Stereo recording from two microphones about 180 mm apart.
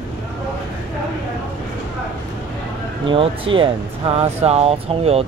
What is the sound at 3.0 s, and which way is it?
Speech, 30° right (ahead or behind).